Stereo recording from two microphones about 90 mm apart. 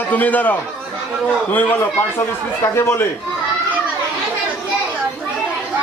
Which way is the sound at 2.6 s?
30° left (ahead or behind).